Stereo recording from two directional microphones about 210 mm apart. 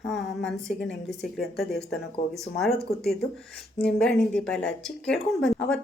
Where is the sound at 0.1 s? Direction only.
Centre (ahead or behind).